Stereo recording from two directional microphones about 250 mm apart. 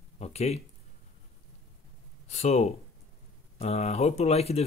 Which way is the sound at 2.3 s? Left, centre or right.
Left.